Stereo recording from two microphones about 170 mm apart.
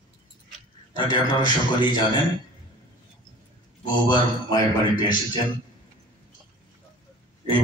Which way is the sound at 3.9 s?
25° left (ahead or behind).